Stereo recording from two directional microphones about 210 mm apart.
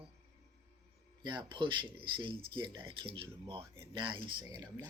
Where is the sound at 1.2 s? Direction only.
20° right (ahead or behind).